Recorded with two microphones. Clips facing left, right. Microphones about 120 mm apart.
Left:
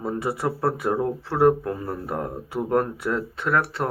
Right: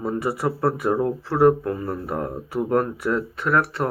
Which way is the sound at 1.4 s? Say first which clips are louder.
Right 2 dB; 25° left (ahead or behind).